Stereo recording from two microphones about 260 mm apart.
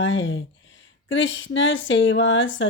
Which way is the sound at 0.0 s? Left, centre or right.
Left.